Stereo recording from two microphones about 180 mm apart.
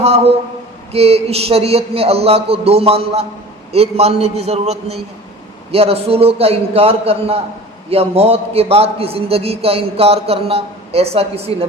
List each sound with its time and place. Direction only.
0.9 s a man's voice: 35° right (ahead or behind)